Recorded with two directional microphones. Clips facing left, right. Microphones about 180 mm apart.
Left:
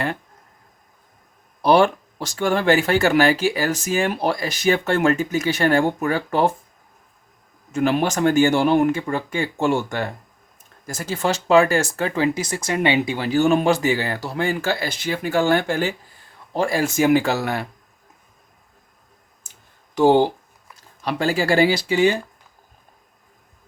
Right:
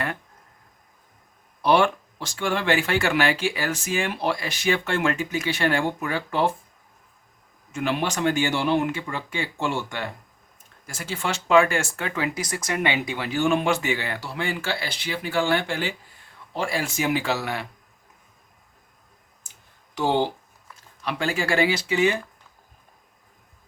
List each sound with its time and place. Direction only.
1.6 s speech: 40° left (ahead or behind)
7.7 s speech: 45° left (ahead or behind)
20.0 s speech: 45° left (ahead or behind)